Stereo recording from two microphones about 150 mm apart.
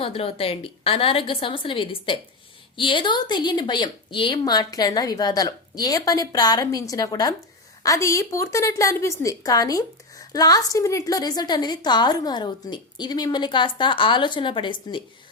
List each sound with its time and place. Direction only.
0.0 s a woman's voice: 40° left (ahead or behind)